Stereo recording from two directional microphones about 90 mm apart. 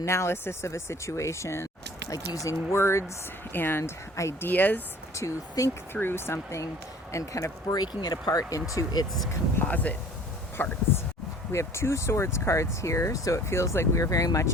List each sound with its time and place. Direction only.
0.0 s speech: 30° left (ahead or behind)
5.1 s speech: 35° left (ahead or behind)
5.9 s speech: 25° left (ahead or behind); by 9.0 s 45° left (ahead or behind)
9.6 s speech: 15° left (ahead or behind)
11.5 s speech: 30° left (ahead or behind)